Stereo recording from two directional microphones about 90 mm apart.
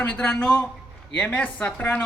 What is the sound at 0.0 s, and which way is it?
A man's voice, 15° left (ahead or behind).